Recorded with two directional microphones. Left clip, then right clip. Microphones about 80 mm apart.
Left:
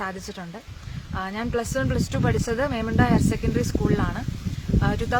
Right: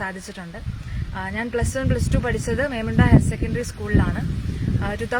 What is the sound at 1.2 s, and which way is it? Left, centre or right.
Speech, left.